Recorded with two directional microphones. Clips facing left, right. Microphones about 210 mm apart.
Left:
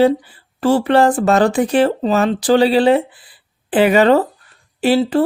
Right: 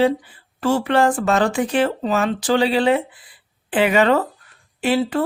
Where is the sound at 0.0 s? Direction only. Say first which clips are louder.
Left 4 dB; 35° left (ahead or behind).